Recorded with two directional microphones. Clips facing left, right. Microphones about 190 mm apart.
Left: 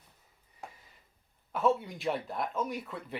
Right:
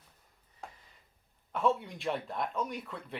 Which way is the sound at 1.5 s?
Centre (ahead or behind).